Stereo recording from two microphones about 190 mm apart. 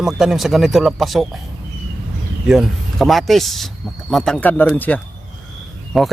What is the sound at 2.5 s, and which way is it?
A man's voice, centre (ahead or behind).